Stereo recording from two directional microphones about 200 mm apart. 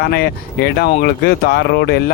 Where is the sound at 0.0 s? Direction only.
55° left (ahead or behind).